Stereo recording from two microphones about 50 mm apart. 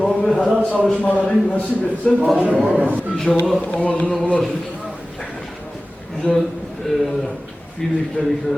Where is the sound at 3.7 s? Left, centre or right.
Left.